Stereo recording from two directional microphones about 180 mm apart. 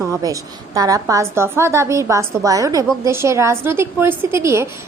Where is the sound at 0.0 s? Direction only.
20° right (ahead or behind).